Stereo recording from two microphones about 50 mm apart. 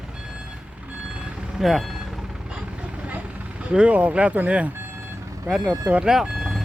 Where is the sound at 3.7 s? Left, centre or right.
Right.